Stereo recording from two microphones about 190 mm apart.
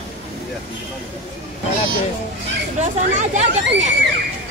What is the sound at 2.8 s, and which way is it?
Speech, 40° right (ahead or behind).